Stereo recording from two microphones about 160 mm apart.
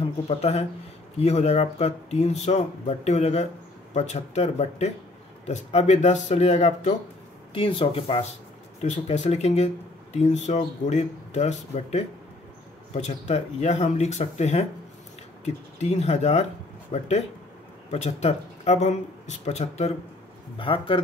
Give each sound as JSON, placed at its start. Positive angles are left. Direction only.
{"t": 0.0, "sound": "speech", "side_deg": 40}
{"t": 7.5, "sound": "speech", "side_deg": 35}
{"t": 20.5, "sound": "speech", "side_deg": 35}